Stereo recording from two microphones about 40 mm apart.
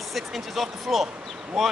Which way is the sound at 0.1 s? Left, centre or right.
Centre.